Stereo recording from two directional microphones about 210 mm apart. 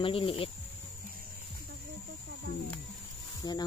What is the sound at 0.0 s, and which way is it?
Speech, 25° left (ahead or behind).